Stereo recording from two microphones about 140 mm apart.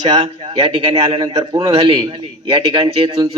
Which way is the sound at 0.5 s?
35° right (ahead or behind).